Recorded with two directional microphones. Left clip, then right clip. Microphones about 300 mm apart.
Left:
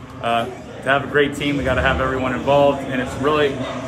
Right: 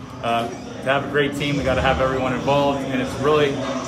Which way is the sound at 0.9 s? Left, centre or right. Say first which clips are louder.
Left 3 dB; centre.